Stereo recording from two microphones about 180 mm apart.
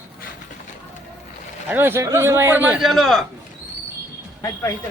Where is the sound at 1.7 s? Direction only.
10° right (ahead or behind).